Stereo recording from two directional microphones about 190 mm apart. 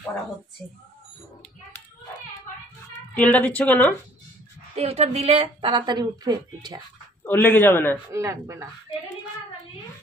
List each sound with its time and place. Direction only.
3.2 s a woman's voice: 10° left (ahead or behind)
4.7 s a woman's voice: 35° right (ahead or behind)
7.2 s a woman's voice: 10° left (ahead or behind)
8.1 s speech: 15° right (ahead or behind)